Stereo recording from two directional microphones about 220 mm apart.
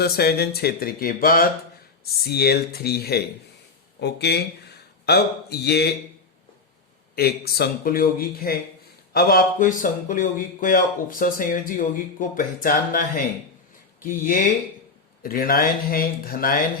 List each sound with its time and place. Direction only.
0.0 s speech: 45° left (ahead or behind)
7.2 s speech: 45° left (ahead or behind)